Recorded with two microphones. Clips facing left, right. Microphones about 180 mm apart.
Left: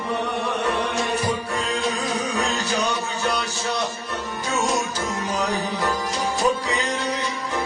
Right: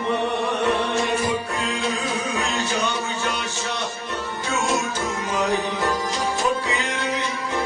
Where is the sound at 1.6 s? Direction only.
35° left (ahead or behind).